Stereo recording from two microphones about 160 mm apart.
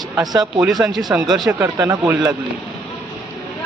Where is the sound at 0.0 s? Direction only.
25° right (ahead or behind).